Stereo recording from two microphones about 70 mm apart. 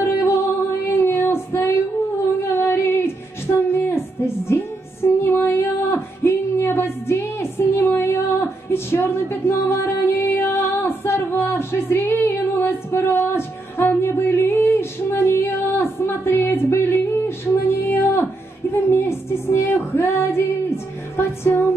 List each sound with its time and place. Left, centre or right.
0.0 s music: left
0.9 s female singing: left
3.5 s music: left
17.8 s a sound: left
18.9 s music: left